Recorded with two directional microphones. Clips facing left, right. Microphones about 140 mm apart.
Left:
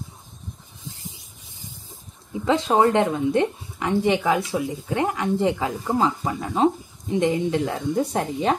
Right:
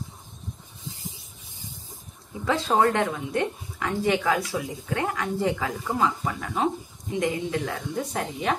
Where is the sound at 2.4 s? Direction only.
20° left (ahead or behind).